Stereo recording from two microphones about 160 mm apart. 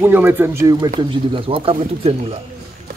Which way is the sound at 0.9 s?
30° right (ahead or behind).